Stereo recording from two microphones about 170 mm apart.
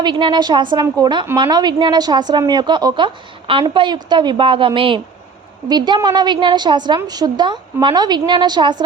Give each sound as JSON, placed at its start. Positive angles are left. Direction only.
{"t": 0.0, "sound": "a woman's voice", "side_deg": -25}